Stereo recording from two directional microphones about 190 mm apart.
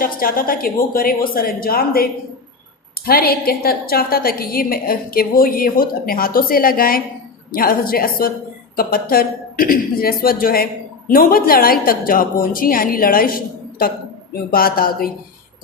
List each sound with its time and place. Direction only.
0.0 s a woman's voice: 50° left (ahead or behind)
3.1 s a woman's voice: 50° left (ahead or behind)